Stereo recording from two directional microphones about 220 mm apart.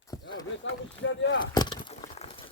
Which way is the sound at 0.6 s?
55° left (ahead or behind).